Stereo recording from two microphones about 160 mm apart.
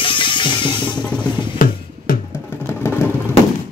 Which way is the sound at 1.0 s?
5° left (ahead or behind).